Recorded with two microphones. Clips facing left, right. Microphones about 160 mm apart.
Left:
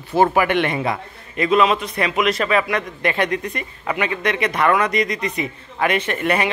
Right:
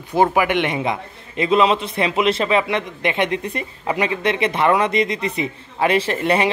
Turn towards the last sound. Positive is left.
turn(degrees=-30)  # may be behind; listen again after turning